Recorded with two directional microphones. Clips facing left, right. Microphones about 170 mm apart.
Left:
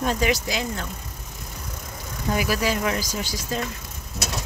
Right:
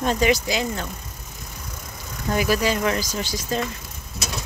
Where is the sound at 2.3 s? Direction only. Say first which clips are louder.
Right 3 dB; 5° left (ahead or behind).